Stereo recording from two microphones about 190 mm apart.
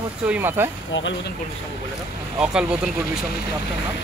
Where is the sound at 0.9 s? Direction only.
75° left (ahead or behind).